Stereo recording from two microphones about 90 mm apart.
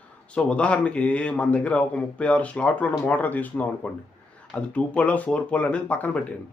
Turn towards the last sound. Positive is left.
turn(degrees=15)  # may be behind; listen again after turning